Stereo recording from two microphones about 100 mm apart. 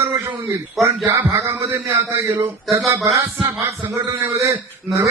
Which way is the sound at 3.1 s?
30° right (ahead or behind).